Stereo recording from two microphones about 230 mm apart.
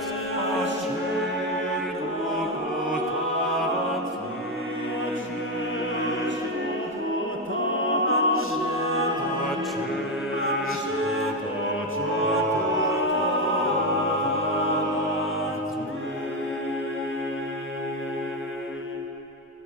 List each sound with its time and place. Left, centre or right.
8.1 s music: left